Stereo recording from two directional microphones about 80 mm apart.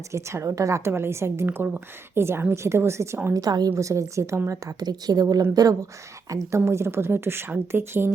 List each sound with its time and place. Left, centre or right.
0.1 s a woman's voice: right
3.3 s a woman's voice: right
3.7 s a woman's voice: right
4.4 s a woman's voice: right